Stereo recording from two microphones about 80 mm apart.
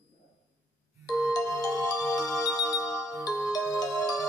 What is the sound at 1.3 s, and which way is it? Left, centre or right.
Music, left.